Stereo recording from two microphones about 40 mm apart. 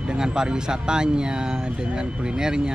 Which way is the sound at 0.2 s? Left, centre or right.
Centre.